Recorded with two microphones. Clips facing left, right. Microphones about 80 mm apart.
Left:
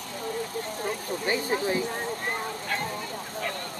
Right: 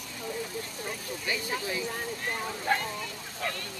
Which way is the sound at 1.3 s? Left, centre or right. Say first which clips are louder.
Left 6 dB; left.